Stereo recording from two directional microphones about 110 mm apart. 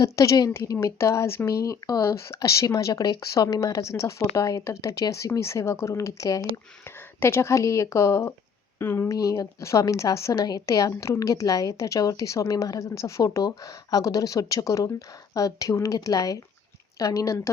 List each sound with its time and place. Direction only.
0.0 s a woman's voice: 30° left (ahead or behind)